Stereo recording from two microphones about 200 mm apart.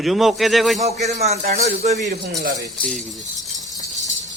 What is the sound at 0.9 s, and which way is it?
Speech, 35° right (ahead or behind).